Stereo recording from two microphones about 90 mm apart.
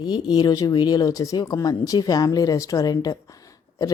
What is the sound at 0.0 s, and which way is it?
A woman's voice, 50° left (ahead or behind).